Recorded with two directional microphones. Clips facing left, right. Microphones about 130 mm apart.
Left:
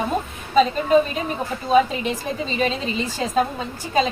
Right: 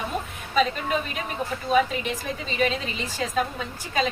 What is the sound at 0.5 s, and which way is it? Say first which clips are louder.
A woman's voice: left 8 dB; 30° left (ahead or behind).